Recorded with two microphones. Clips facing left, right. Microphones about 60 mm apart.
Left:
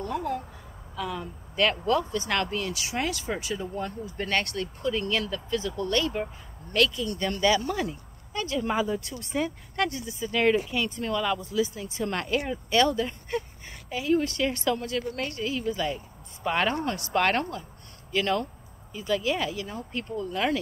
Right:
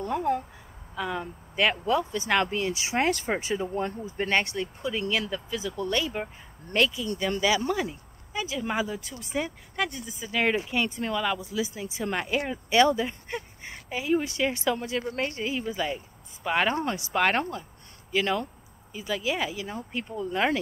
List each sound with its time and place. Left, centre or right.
0.0 s speech: right
3.1 s speech: right; by 6.3 s centre
6.7 s speech: right
7.2 s speech: centre
10.7 s speech: right
11.1 s speech: centre